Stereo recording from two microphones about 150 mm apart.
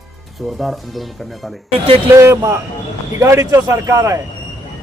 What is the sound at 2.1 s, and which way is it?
A man's voice, 20° right (ahead or behind).